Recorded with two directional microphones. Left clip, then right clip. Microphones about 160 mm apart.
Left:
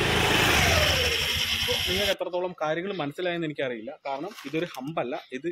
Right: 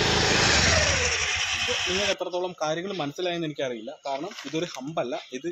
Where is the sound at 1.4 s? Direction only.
90° left.